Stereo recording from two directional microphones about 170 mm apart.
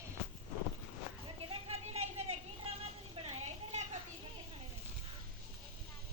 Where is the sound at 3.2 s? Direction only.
40° right (ahead or behind).